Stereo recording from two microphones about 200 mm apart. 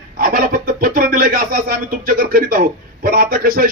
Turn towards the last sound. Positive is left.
turn(degrees=-45)  # may be behind; listen again after turning